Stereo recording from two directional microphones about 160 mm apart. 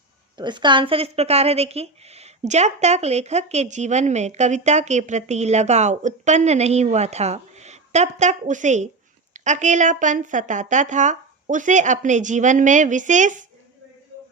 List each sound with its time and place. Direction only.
0.3 s speech: 30° right (ahead or behind); by 13.5 s 50° right (ahead or behind)